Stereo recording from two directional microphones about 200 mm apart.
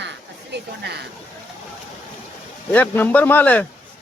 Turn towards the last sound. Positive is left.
turn(degrees=10)  # may be behind; listen again after turning